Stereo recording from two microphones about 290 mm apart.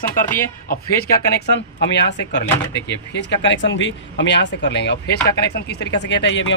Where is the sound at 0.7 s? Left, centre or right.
Left.